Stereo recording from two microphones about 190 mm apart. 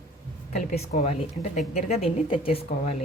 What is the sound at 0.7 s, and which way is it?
Speech, 35° left (ahead or behind).